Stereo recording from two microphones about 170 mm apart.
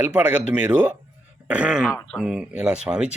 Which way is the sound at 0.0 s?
10° right (ahead or behind).